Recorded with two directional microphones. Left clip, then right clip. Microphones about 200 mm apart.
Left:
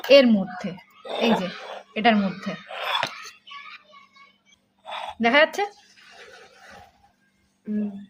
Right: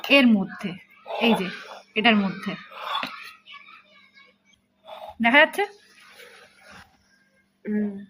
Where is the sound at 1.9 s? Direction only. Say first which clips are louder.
Even; 15° left (ahead or behind).